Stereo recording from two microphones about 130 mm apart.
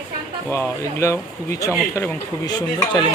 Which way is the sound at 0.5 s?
20° left (ahead or behind).